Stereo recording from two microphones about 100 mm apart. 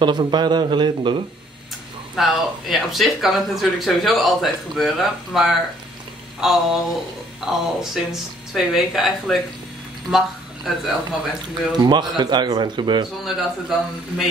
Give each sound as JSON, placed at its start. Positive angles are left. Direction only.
{"t": 0.0, "sound": "speech", "side_deg": -50}
{"t": 2.1, "sound": "speech", "side_deg": 0}
{"t": 11.7, "sound": "speech", "side_deg": -45}
{"t": 13.2, "sound": "speech", "side_deg": -5}